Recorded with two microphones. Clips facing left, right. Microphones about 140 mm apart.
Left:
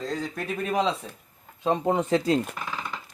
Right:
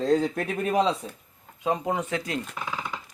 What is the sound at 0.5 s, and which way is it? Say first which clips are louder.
Speech: even; 40° right (ahead or behind).